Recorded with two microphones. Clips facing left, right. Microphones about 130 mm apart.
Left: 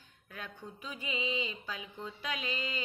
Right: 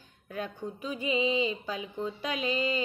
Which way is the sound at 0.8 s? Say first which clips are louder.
Right 9 dB; 20° right (ahead or behind).